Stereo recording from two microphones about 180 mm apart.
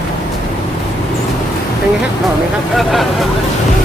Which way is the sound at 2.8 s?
Centre (ahead or behind).